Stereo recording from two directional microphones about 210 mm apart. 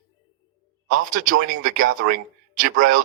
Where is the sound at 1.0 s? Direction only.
40° right (ahead or behind).